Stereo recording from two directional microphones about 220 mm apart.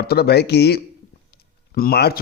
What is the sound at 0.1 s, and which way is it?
Speech, 45° left (ahead or behind).